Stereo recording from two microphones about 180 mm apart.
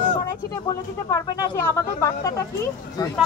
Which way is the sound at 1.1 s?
15° left (ahead or behind).